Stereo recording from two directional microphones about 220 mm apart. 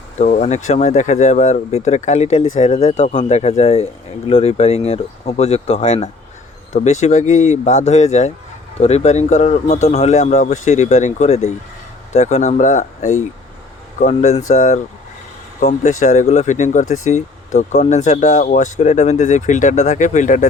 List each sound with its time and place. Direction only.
0.2 s speech: 35° left (ahead or behind)